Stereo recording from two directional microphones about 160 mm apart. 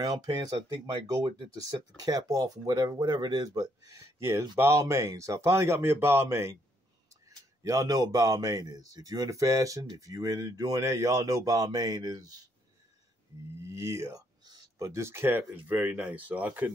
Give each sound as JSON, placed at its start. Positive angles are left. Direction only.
{"t": 0.0, "sound": "a man's voice", "side_deg": -25}
{"t": 13.6, "sound": "speech", "side_deg": -20}